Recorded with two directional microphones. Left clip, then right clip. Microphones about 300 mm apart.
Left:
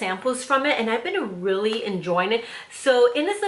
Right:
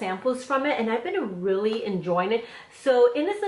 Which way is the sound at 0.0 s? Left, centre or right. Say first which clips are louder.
Left 2 dB; centre.